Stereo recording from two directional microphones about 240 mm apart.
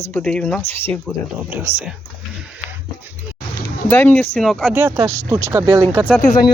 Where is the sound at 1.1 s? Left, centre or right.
Centre.